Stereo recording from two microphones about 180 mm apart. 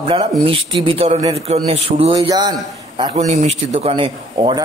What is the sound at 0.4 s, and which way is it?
A man's voice, 30° right (ahead or behind).